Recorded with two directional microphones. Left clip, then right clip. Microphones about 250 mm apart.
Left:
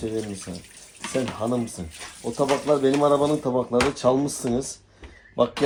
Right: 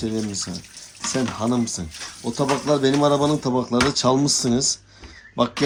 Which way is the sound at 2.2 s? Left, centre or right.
Right.